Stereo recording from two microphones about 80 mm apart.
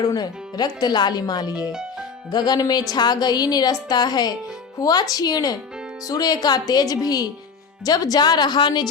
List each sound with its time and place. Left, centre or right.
0.0 s speech: left
1.7 s music: centre
2.3 s speech: left